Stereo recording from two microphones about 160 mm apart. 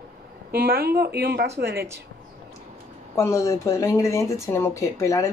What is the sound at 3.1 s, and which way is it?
Speech, 15° left (ahead or behind).